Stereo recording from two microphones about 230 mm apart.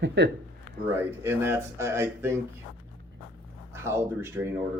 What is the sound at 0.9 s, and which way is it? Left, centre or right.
Speech, centre.